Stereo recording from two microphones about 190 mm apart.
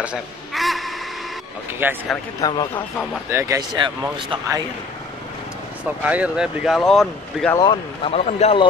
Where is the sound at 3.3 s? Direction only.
15° right (ahead or behind).